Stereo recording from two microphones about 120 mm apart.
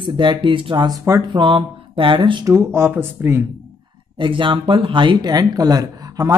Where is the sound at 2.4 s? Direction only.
25° right (ahead or behind).